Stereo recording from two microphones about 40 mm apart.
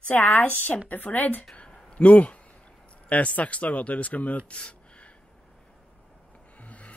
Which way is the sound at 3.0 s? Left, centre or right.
Left.